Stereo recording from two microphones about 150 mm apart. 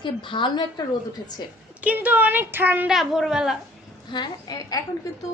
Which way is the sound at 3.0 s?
Centre (ahead or behind).